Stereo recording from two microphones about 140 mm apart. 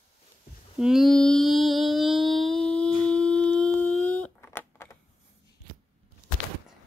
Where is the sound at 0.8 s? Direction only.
Centre (ahead or behind); by 5.0 s 15° left (ahead or behind).